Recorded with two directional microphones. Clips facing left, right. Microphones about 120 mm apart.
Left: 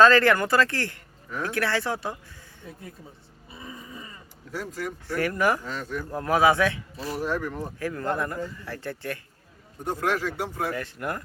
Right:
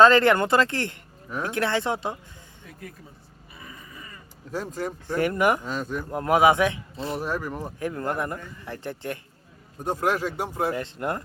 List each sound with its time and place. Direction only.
0.0 s speech: 20° right (ahead or behind)
4.5 s speech: 25° right (ahead or behind)
7.3 s speech: 10° right (ahead or behind)
7.5 s speech: 20° right (ahead or behind)